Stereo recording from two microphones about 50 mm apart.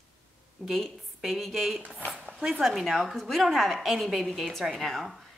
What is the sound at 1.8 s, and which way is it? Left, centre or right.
Speech, right.